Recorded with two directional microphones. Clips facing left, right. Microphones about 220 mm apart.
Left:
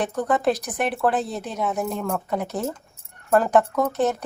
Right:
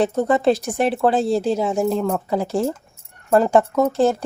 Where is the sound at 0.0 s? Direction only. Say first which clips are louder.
Right 5 dB; 25° right (ahead or behind).